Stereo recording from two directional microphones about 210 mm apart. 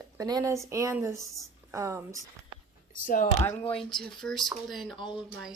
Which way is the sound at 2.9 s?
40° left (ahead or behind).